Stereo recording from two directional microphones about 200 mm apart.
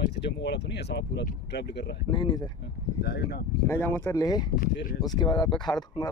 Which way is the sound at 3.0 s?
55° left (ahead or behind).